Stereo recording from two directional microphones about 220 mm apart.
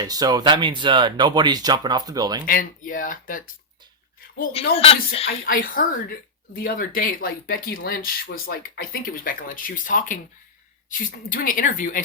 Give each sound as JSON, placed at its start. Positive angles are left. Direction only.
{"t": 0.0, "sound": "speech", "side_deg": -15}
{"t": 2.5, "sound": "speech", "side_deg": 40}
{"t": 4.7, "sound": "speech", "side_deg": 25}
{"t": 5.5, "sound": "speech", "side_deg": 40}